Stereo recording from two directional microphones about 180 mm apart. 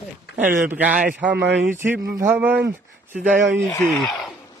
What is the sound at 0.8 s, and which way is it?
Speech, 5° right (ahead or behind).